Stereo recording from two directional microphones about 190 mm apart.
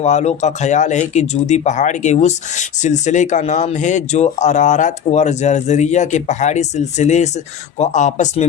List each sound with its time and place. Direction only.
0.0 s speech: 35° left (ahead or behind)